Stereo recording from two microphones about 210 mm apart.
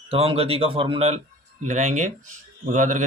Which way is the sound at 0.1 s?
30° right (ahead or behind).